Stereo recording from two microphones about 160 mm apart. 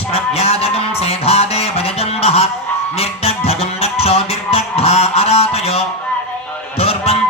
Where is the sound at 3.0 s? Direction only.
40° left (ahead or behind).